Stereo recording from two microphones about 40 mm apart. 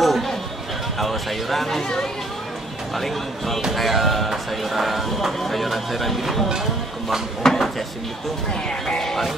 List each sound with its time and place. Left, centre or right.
0.0 s a sound: centre
0.9 s speech: centre
3.0 s speech: centre
7.4 s speech: centre
8.6 s speech: centre
9.0 s music: centre